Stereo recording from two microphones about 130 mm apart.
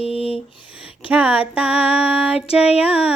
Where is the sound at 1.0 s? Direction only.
10° right (ahead or behind).